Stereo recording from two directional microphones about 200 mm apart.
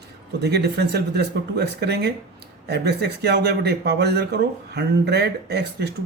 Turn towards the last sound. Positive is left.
turn(degrees=-55)  # may be behind; listen again after turning